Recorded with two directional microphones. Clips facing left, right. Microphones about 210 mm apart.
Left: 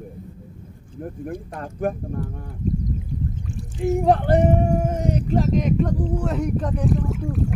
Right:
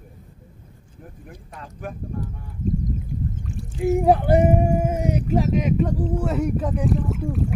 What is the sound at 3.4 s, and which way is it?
Speech, centre (ahead or behind).